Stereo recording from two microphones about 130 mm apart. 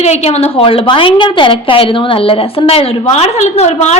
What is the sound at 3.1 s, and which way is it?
Speech, 60° left (ahead or behind).